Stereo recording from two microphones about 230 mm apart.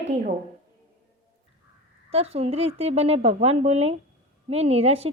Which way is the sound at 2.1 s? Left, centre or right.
Right.